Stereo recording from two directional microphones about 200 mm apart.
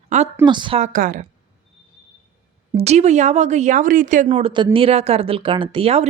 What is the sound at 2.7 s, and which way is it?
Speech, 35° right (ahead or behind).